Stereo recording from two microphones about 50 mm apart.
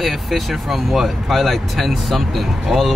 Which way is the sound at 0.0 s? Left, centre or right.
Centre.